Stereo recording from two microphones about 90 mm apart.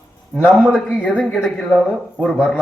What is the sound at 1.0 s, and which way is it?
A man's voice, 10° left (ahead or behind).